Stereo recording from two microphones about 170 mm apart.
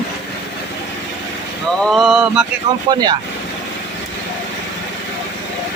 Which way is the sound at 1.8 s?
Centre (ahead or behind).